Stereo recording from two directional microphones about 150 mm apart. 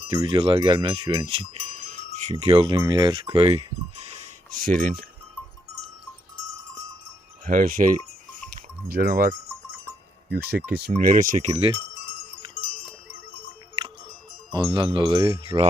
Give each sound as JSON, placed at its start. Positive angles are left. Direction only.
{"t": 0.1, "sound": "a sound", "side_deg": -30}
{"t": 2.0, "sound": "wind chime", "side_deg": -55}
{"t": 2.3, "sound": "a sound", "side_deg": -35}
{"t": 3.3, "sound": "speech", "side_deg": -40}
{"t": 4.5, "sound": "speech", "side_deg": -65}
{"t": 7.4, "sound": "speech", "side_deg": -65}
{"t": 8.9, "sound": "speech", "side_deg": -80}
{"t": 10.2, "sound": "speech", "side_deg": -90}
{"t": 11.0, "sound": "speech", "side_deg": -60}
{"t": 14.5, "sound": "a sound", "side_deg": -30}